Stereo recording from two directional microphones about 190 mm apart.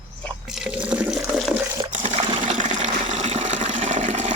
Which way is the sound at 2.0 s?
40° right (ahead or behind).